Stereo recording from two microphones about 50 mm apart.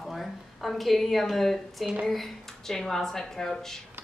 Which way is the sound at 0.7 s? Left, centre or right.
Centre.